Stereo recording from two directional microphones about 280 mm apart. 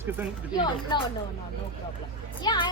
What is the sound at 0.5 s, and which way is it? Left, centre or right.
Speech, centre.